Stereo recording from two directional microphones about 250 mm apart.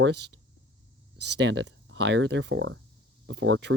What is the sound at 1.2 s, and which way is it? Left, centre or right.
Speech, right.